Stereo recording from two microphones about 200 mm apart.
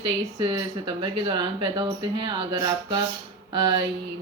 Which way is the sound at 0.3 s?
20° right (ahead or behind).